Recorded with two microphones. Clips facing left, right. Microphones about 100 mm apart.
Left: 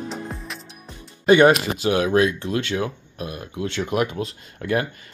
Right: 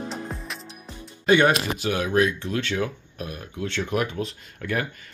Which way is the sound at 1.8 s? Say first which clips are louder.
Left 4 dB; 20° left (ahead or behind).